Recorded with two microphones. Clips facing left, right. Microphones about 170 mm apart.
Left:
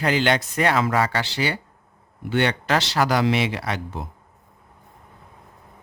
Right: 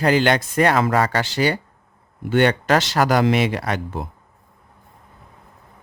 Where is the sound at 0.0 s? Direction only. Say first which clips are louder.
Right 4 dB; 45° right (ahead or behind).